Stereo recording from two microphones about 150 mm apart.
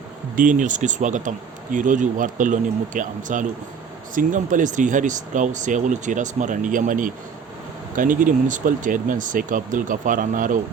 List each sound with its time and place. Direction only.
0.3 s speech: 60° right (ahead or behind)